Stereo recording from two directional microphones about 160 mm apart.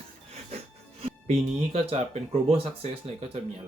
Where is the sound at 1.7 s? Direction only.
40° right (ahead or behind).